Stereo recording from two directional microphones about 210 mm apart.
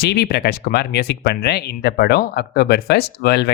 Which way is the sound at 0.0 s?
50° left (ahead or behind).